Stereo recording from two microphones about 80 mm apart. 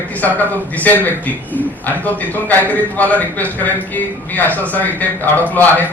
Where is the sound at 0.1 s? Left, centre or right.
Left.